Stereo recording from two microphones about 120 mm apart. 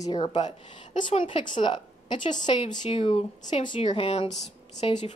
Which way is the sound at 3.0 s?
55° left (ahead or behind).